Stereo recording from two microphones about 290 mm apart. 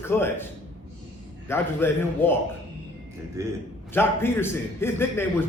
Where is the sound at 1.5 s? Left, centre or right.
Centre.